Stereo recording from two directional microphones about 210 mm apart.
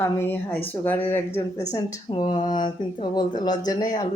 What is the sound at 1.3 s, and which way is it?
A woman's voice, 30° left (ahead or behind).